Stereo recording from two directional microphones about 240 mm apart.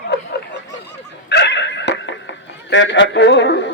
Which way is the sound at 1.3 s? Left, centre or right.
Left.